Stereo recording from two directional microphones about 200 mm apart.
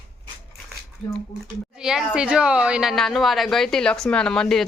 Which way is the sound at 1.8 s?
5° right (ahead or behind).